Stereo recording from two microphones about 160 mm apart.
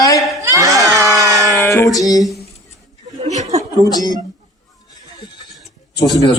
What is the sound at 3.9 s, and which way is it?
Speech, 25° left (ahead or behind).